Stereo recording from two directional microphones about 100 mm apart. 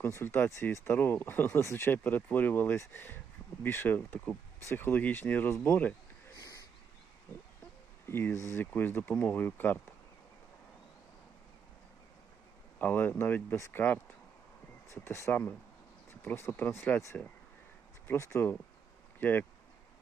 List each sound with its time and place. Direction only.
0.0 s speech: 25° left (ahead or behind)
8.0 s speech: 20° left (ahead or behind)
12.8 s speech: 20° left (ahead or behind)
18.1 s speech: 25° left (ahead or behind)